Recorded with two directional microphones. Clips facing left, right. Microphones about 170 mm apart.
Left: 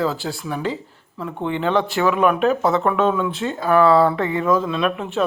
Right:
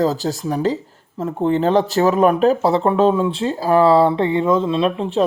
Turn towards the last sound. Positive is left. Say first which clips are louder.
# right 4 dB
turn(degrees=-30)  # may be behind; listen again after turning